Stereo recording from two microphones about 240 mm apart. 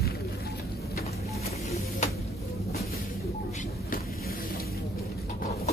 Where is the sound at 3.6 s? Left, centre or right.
Left.